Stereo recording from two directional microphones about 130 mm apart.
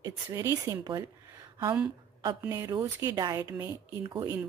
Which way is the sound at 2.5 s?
25° right (ahead or behind).